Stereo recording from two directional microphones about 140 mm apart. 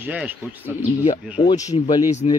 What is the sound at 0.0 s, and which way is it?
Speech, 10° right (ahead or behind).